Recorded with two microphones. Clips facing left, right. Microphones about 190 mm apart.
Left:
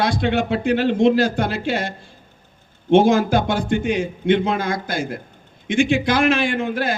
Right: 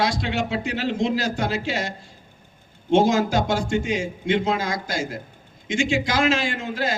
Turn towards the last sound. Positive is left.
turn(degrees=55)  # may be behind; listen again after turning